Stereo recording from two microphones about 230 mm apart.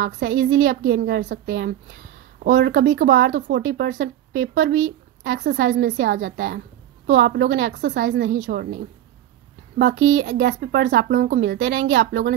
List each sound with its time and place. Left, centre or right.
0.0 s speech: right
0.7 s speech: right
3.3 s a woman's voice: right
4.6 s a woman's voice: right
9.9 s speech: right
10.4 s speech: right